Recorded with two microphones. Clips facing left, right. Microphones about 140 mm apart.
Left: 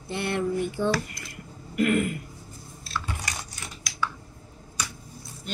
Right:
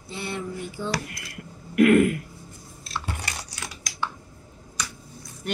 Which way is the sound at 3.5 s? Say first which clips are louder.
Right 3 dB; 90° right.